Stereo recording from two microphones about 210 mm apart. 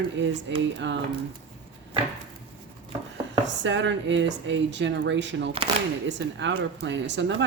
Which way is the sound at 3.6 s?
60° right (ahead or behind).